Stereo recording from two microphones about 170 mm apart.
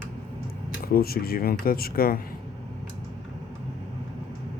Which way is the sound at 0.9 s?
60° left (ahead or behind).